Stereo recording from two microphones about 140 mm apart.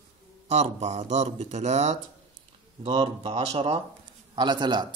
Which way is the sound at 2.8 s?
40° right (ahead or behind).